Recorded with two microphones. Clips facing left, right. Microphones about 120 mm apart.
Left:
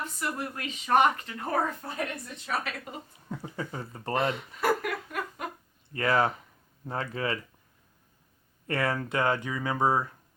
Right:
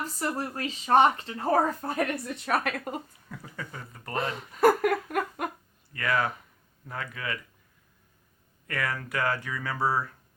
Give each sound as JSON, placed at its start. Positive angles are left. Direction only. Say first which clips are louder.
{"t": 0.0, "sound": "speech", "louder": "right 2 dB", "side_deg": -35}
{"t": 2.2, "sound": "a woman's voice", "louder": "right 5 dB", "side_deg": -55}
{"t": 3.2, "sound": "speech", "louder": "left 5 dB", "side_deg": 25}
{"t": 4.3, "sound": "a sound", "louder": "right 5 dB", "side_deg": -45}
{"t": 5.9, "sound": "speech", "louder": "left 3 dB", "side_deg": 30}
{"t": 8.6, "sound": "speech", "louder": "left 4 dB", "side_deg": 30}